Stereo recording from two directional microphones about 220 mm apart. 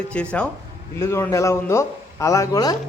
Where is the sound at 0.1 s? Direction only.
5° left (ahead or behind).